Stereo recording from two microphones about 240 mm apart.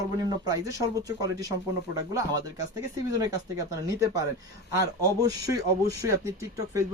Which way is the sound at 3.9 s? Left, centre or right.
Centre.